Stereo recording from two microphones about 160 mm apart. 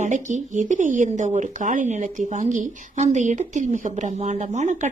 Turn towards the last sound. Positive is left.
turn(degrees=-45)  # may be behind; listen again after turning